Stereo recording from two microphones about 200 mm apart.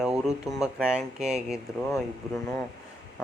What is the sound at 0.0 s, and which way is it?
Speech, 5° right (ahead or behind).